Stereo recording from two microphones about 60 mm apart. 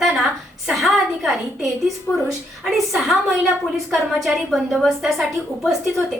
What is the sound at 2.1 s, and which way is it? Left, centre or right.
Speech, left.